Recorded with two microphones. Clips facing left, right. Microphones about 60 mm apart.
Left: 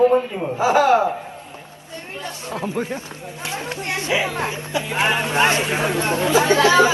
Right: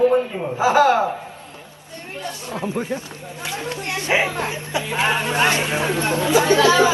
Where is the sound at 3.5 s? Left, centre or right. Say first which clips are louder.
Even; left.